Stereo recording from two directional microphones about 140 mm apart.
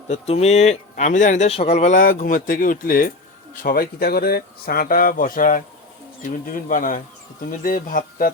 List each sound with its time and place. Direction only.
0.1 s speech: 50° left (ahead or behind)
1.5 s speech: 50° left (ahead or behind)
2.0 s speech: 85° left